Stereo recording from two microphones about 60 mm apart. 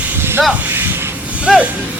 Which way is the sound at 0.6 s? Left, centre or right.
Right.